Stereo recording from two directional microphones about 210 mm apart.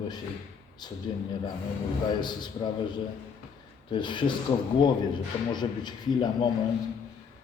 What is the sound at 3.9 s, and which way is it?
Speech, 20° left (ahead or behind).